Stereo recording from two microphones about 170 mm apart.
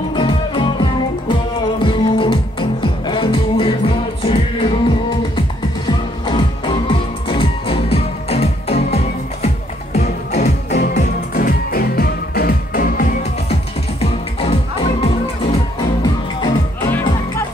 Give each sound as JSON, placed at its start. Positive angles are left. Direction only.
{"t": 0.1, "sound": "music", "side_deg": 30}
{"t": 13.5, "sound": "music", "side_deg": 35}